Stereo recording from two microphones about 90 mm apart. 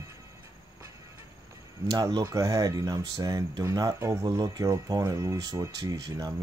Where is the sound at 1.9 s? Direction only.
55° right (ahead or behind).